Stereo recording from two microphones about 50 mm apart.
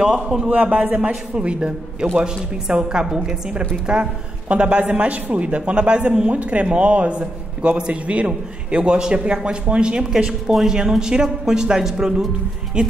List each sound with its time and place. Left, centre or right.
0.0 s speech: centre
0.5 s a woman's voice: right